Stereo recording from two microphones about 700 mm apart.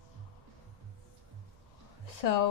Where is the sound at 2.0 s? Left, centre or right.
Left.